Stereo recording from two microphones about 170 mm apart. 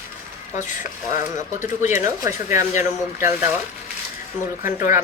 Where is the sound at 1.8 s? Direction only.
15° right (ahead or behind).